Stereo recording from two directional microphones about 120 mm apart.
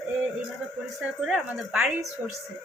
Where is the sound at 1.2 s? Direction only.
5° right (ahead or behind).